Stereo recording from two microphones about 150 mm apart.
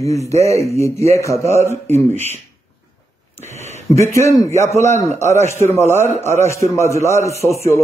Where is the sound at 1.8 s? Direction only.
50° right (ahead or behind).